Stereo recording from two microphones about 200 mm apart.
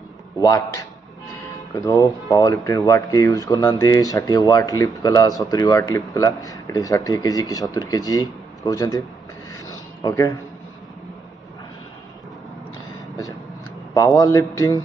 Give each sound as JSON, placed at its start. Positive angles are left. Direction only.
{"t": 0.4, "sound": "speech", "side_deg": 20}
{"t": 1.9, "sound": "speech", "side_deg": 15}
{"t": 9.5, "sound": "a sound", "side_deg": 15}
{"t": 13.9, "sound": "speech", "side_deg": 15}